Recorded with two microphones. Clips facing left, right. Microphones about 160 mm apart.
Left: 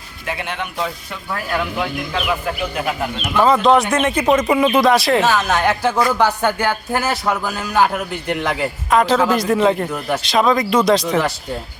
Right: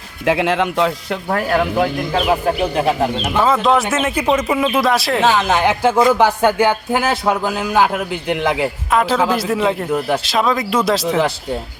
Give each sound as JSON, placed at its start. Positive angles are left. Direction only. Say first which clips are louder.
{"t": 0.3, "sound": "speech", "louder": "right 10 dB", "side_deg": -90}
{"t": 1.4, "sound": "speech", "louder": "right 5 dB", "side_deg": -45}
{"t": 3.4, "sound": "a man's voice", "louder": "left 2 dB", "side_deg": 0}
{"t": 5.2, "sound": "speech", "louder": "right 2 dB", "side_deg": -15}
{"t": 8.9, "sound": "a man's voice", "louder": "left 2 dB", "side_deg": -5}